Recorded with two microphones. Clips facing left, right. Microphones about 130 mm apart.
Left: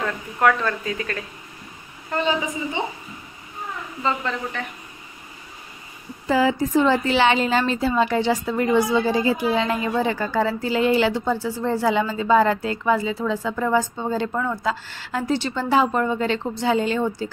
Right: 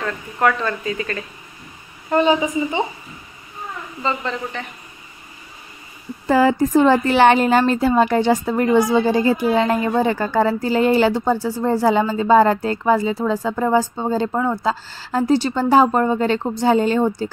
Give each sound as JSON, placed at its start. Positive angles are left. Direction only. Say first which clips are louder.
{"t": 0.0, "sound": "speech", "louder": "right 1 dB", "side_deg": 0}
{"t": 4.0, "sound": "speech", "louder": "right 1 dB", "side_deg": 0}
{"t": 6.2, "sound": "a woman's voice", "louder": "right 4 dB", "side_deg": -50}